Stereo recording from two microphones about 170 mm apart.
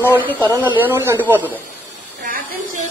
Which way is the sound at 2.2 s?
50° right (ahead or behind).